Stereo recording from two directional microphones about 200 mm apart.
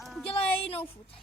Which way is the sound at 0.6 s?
30° left (ahead or behind).